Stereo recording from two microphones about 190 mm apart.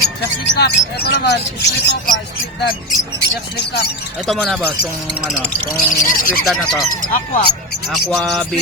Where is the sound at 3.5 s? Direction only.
60° left (ahead or behind).